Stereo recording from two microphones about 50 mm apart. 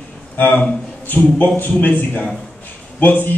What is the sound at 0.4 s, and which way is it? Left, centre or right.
A man's voice, left.